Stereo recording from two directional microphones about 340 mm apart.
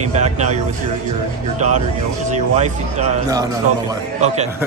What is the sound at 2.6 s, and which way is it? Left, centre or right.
Speech, centre.